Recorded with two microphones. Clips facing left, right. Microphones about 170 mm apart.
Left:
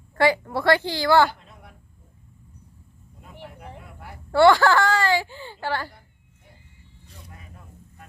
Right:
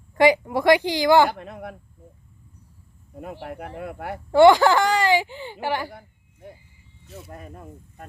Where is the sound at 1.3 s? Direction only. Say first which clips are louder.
Right 10 dB; 65° right (ahead or behind).